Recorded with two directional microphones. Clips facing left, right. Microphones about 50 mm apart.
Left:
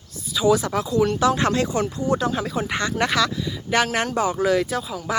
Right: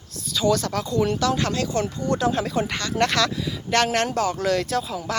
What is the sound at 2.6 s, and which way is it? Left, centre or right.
Speech, left.